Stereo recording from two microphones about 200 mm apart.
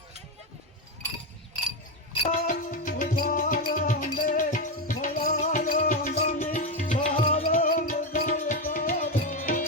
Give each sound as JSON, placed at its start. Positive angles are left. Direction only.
{"t": 2.2, "sound": "music", "side_deg": 40}
{"t": 7.4, "sound": "music", "side_deg": 45}